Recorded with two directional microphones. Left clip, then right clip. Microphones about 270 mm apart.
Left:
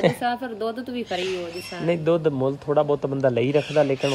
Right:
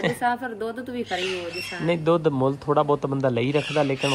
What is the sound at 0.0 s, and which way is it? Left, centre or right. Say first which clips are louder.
Speech: left 2 dB; centre.